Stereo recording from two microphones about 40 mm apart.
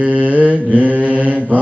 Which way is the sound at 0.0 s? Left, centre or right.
Right.